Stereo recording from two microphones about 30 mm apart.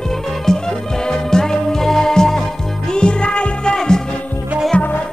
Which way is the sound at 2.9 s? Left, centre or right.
Left.